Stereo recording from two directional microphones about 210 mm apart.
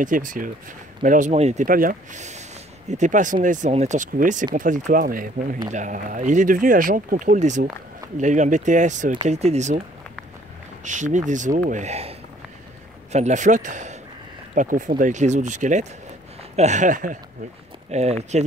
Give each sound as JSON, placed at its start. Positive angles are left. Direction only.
{"t": 0.0, "sound": "speech", "side_deg": -40}